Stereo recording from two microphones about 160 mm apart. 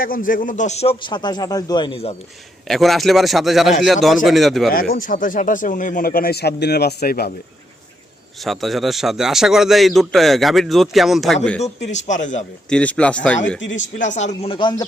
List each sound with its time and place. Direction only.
0.0 s speech: 60° left (ahead or behind); by 0.9 s 45° left (ahead or behind)
1.0 s speech: 25° left (ahead or behind)
2.6 s a man's voice: centre (ahead or behind)
4.7 s speech: 65° left (ahead or behind)
8.4 s a man's voice: centre (ahead or behind)
11.6 s speech: 50° left (ahead or behind)
12.6 s speech: 5° left (ahead or behind)
14.0 s speech: 45° left (ahead or behind); by 14.8 s 25° left (ahead or behind)